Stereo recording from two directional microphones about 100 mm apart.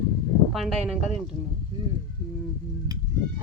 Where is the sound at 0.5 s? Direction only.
Centre (ahead or behind).